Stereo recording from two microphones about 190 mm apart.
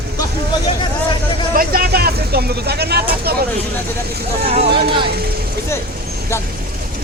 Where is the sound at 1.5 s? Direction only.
50° right (ahead or behind).